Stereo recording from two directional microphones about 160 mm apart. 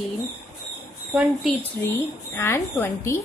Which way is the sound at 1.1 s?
5° right (ahead or behind).